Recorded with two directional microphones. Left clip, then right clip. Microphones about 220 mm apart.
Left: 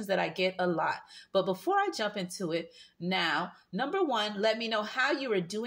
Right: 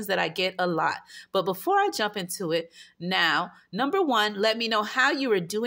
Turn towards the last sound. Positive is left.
turn(degrees=-45)  # may be behind; listen again after turning